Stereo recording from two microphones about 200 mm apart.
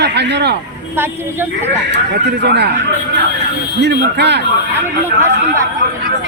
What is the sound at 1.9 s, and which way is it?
Speech, 60° right (ahead or behind).